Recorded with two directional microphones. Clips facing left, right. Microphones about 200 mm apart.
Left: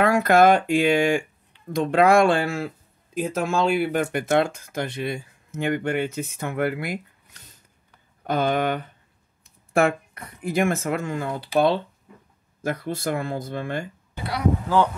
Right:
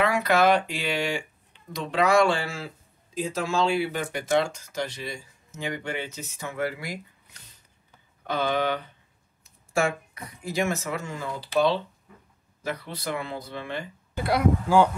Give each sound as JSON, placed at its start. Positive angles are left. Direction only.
{"t": 0.0, "sound": "speech", "side_deg": 45}
{"t": 8.3, "sound": "speech", "side_deg": 50}
{"t": 12.6, "sound": "speech", "side_deg": 50}
{"t": 14.1, "sound": "speech", "side_deg": -50}